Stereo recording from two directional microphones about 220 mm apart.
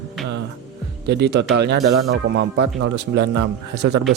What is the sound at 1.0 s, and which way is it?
Speech, 50° right (ahead or behind).